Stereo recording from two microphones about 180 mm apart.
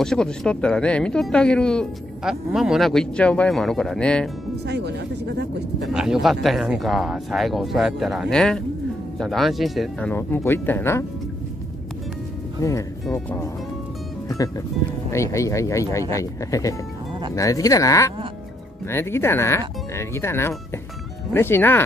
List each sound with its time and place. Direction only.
0.0 s speech: 5° left (ahead or behind)
4.6 s speech: 70° right (ahead or behind)
5.9 s speech: 5° right (ahead or behind); by 11.1 s 15° left (ahead or behind)
12.6 s speech: 15° left (ahead or behind)
15.0 s speech: 15° left (ahead or behind)